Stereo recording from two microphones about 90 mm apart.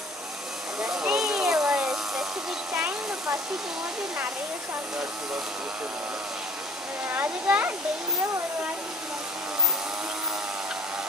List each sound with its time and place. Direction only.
0.7 s hair dryer: 5° right (ahead or behind)
7.1 s speech: 20° right (ahead or behind)